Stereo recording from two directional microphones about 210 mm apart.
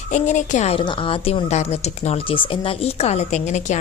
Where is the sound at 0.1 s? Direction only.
35° left (ahead or behind).